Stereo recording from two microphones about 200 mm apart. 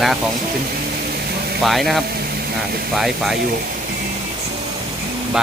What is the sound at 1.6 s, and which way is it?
Speech, centre (ahead or behind).